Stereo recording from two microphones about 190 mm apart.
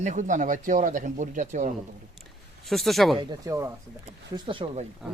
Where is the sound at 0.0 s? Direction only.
40° right (ahead or behind).